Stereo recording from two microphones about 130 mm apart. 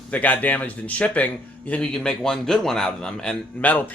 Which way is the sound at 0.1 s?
10° left (ahead or behind).